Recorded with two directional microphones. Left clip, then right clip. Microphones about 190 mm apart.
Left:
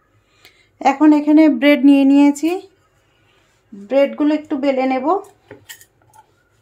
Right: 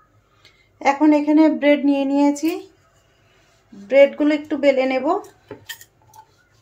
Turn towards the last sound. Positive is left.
turn(degrees=25)  # may be behind; listen again after turning